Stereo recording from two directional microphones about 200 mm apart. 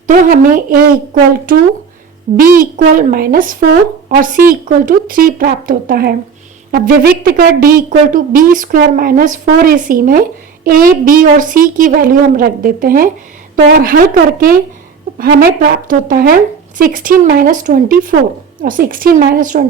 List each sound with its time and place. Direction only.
0.1 s a woman's voice: 45° right (ahead or behind)
2.3 s a woman's voice: 45° right (ahead or behind)